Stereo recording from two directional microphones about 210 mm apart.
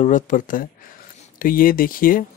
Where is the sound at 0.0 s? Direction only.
40° left (ahead or behind).